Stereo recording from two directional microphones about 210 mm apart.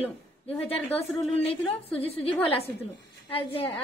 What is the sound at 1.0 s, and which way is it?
Speech, 30° left (ahead or behind).